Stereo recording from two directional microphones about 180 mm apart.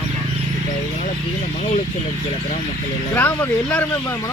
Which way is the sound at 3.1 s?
10° left (ahead or behind).